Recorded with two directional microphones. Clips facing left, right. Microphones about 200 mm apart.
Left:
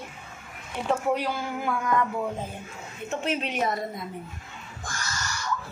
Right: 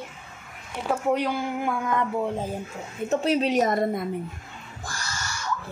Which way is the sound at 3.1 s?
35° right (ahead or behind).